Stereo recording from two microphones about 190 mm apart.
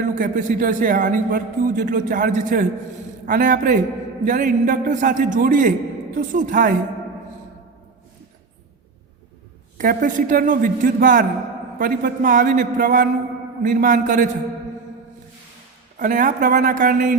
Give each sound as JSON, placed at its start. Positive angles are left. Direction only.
{"t": 0.0, "sound": "a man's voice", "side_deg": -45}
{"t": 9.7, "sound": "a man's voice", "side_deg": -45}
{"t": 16.0, "sound": "a man's voice", "side_deg": -45}